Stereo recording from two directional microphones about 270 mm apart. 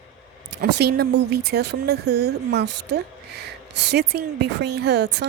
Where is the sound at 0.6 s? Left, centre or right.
Right.